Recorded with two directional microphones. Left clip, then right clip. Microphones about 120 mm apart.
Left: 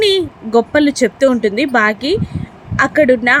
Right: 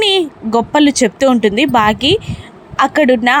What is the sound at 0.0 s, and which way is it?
A woman's voice, 35° right (ahead or behind).